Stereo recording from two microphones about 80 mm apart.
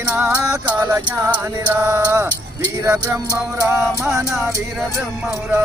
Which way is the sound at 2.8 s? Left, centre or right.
Right.